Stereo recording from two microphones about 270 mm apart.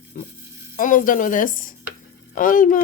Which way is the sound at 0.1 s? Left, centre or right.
Left.